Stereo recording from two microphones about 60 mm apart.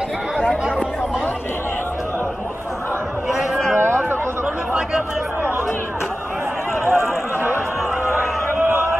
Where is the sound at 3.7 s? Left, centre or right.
Right.